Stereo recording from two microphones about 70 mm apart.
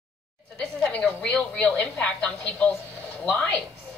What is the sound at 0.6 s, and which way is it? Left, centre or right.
A woman's voice, centre.